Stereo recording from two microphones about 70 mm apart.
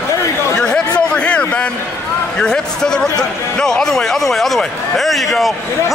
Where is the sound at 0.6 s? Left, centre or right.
Centre.